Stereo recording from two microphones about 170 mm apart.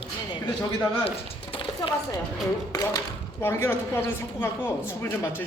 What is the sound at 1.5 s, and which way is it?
A woman's voice, 30° left (ahead or behind).